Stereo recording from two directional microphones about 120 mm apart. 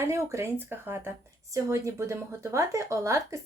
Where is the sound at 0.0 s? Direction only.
25° right (ahead or behind).